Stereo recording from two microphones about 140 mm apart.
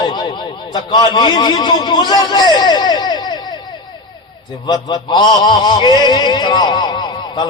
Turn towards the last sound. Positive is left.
turn(degrees=30)  # may be behind; listen again after turning